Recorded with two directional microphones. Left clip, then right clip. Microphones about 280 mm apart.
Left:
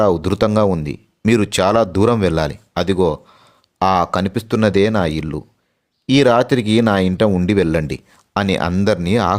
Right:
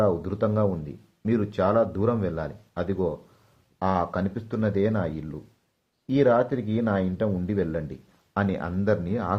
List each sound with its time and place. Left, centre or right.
0.0 s speech: left